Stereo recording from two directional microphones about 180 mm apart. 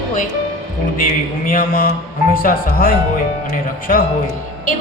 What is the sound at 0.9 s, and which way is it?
Speech, 50° left (ahead or behind).